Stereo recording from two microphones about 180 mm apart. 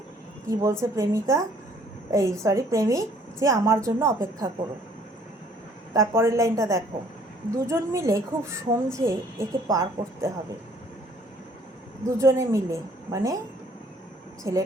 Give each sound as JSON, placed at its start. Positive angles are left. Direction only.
{"t": 0.4, "sound": "a woman's voice", "side_deg": -15}
{"t": 5.9, "sound": "a woman's voice", "side_deg": -15}
{"t": 12.0, "sound": "a woman's voice", "side_deg": -15}
{"t": 14.5, "sound": "a woman's voice", "side_deg": -15}